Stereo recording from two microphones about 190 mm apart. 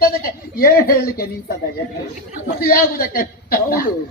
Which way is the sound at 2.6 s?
50° left (ahead or behind).